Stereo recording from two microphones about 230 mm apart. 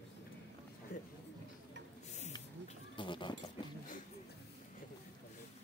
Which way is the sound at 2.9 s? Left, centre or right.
Left.